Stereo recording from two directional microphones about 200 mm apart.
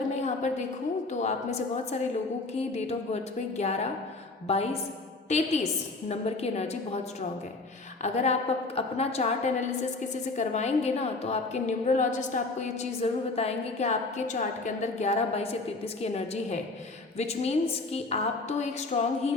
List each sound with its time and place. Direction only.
0.2 s a sound: 35° left (ahead or behind)
1.1 s a woman's voice: 35° left (ahead or behind)
6.1 s a woman's voice: 30° left (ahead or behind)
8.0 s a woman's voice: 35° left (ahead or behind)